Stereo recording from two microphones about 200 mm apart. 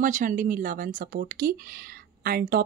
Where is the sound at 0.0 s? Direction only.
40° right (ahead or behind).